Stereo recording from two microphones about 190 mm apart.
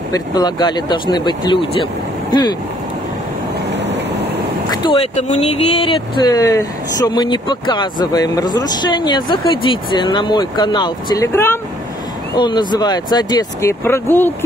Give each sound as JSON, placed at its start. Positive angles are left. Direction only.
{"t": 0.1, "sound": "speech", "side_deg": 20}
{"t": 3.7, "sound": "vehicle", "side_deg": -65}
{"t": 4.6, "sound": "speech", "side_deg": 25}
{"t": 12.4, "sound": "speech", "side_deg": 25}